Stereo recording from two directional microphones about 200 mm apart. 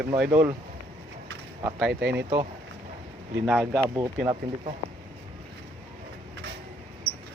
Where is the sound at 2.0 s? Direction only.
55° right (ahead or behind).